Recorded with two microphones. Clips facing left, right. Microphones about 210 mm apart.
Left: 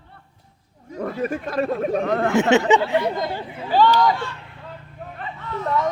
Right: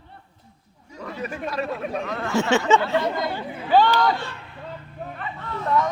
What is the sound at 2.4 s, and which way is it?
Speech, 20° left (ahead or behind).